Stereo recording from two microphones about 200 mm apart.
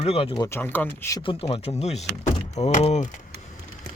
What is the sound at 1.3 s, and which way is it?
Speech, 30° left (ahead or behind).